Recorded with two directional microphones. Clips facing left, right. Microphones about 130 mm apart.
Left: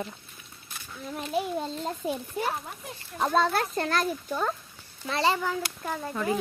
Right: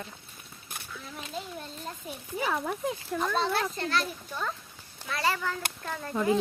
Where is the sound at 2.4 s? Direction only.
80° right.